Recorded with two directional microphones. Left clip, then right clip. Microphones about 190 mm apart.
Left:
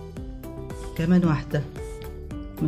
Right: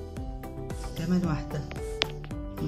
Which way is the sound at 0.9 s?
45° left (ahead or behind).